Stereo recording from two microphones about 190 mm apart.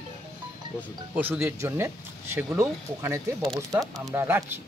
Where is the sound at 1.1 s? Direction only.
10° right (ahead or behind).